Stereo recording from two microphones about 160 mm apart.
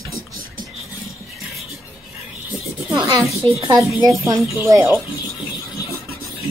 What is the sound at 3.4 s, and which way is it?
Speech, 30° right (ahead or behind).